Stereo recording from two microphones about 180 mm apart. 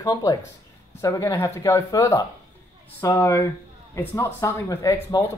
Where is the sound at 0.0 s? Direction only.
20° left (ahead or behind).